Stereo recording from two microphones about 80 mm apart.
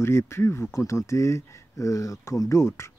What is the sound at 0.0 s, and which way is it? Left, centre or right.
Speech, left.